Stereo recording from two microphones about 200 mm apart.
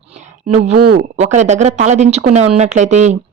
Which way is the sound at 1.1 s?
35° right (ahead or behind).